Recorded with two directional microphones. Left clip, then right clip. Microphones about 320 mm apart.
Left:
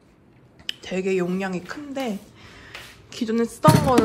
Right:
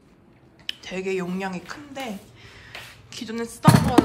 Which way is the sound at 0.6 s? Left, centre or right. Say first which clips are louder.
Left 3 dB; centre.